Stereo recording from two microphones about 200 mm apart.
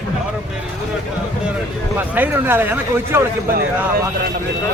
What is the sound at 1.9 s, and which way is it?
A man's voice, 10° right (ahead or behind).